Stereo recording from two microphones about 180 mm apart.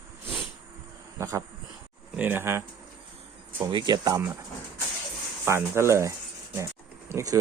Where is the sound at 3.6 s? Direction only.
25° right (ahead or behind).